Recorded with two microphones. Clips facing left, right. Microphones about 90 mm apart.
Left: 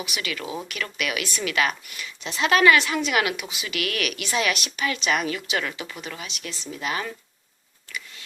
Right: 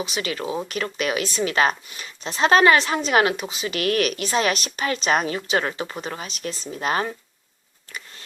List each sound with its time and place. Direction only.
0.0 s a woman's voice: 35° right (ahead or behind)